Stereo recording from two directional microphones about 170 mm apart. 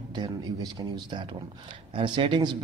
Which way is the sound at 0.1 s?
25° right (ahead or behind).